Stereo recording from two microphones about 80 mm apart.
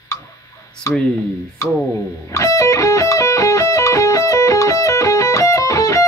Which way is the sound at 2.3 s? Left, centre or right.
Left.